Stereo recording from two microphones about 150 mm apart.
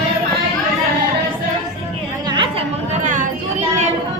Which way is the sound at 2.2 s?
30° right (ahead or behind).